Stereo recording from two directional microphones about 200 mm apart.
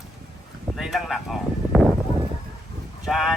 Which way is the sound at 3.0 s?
Centre (ahead or behind).